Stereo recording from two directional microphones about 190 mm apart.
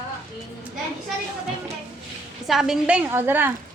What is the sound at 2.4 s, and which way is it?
A woman's voice, centre (ahead or behind).